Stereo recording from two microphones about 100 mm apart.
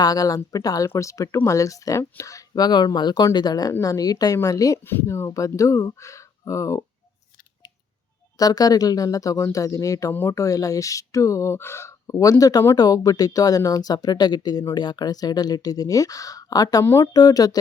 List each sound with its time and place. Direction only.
0.0 s speech: 40° left (ahead or behind)
4.8 s speech: 25° left (ahead or behind)
8.4 s speech: 40° left (ahead or behind)
16.8 s speech: 30° left (ahead or behind)
17.1 s speech: 40° left (ahead or behind)